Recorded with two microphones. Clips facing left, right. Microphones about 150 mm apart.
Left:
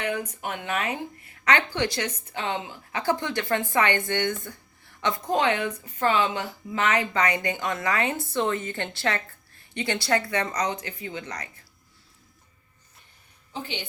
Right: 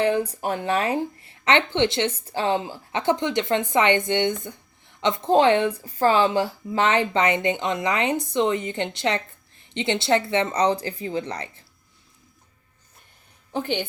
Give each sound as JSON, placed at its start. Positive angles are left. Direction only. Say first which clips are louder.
{"t": 0.0, "sound": "speech", "louder": "right 8 dB", "side_deg": -30}
{"t": 13.5, "sound": "a woman's voice", "louder": "right 9 dB", "side_deg": -55}